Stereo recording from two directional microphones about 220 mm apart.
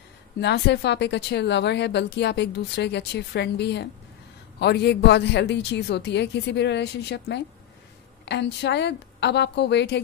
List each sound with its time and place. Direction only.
0.4 s speech: 50° left (ahead or behind)